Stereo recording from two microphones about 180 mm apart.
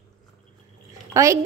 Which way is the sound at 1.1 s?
20° right (ahead or behind).